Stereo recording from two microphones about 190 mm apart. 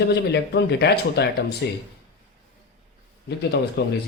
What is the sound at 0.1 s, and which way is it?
Speech, 60° left (ahead or behind).